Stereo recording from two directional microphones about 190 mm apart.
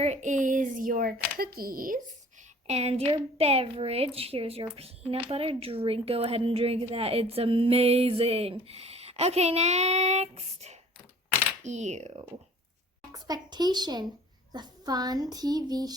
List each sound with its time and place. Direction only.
0.0 s a woman's voice: 40° right (ahead or behind)
2.6 s a woman's voice: 35° right (ahead or behind)
13.1 s a child's voice: 20° right (ahead or behind)